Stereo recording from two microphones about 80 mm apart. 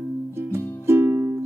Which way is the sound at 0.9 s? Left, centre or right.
Right.